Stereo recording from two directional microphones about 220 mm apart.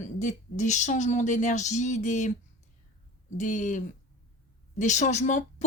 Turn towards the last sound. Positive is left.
turn(degrees=35)  # may be behind; listen again after turning